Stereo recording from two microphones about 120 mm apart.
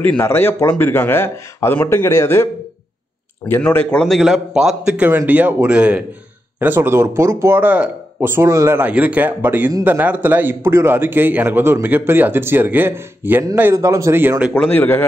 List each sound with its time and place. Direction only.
0.0 s speech: 15° left (ahead or behind)
3.6 s a man's voice: 10° left (ahead or behind); by 14.3 s 20° right (ahead or behind)
14.5 s speech: 15° left (ahead or behind)